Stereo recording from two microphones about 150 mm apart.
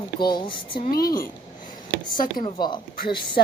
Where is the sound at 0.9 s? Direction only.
85° left.